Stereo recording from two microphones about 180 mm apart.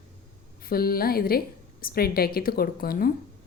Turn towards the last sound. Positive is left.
turn(degrees=55)  # may be behind; listen again after turning